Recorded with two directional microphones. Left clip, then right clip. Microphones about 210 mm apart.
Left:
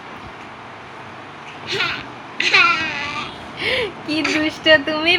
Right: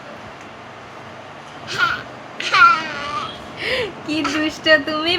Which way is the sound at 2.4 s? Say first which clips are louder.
Right 2 dB; 25° right (ahead or behind).